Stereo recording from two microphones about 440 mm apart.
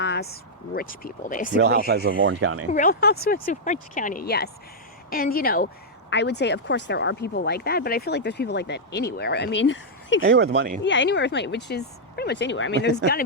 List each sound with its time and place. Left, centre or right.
0.0 s speech: left
1.9 s speech: right
2.7 s speech: centre
10.2 s speech: right
10.8 s speech: left